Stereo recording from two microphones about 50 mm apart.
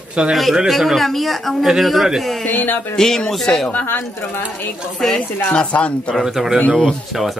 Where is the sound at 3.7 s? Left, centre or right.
Left.